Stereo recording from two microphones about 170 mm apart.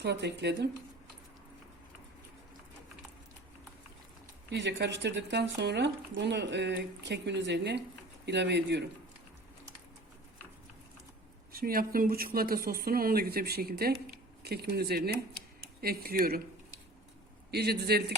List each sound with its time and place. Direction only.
0.0 s speech: 80° right
4.5 s speech: 90° right
11.5 s speech: 60° right (ahead or behind)
17.5 s speech: 70° right (ahead or behind)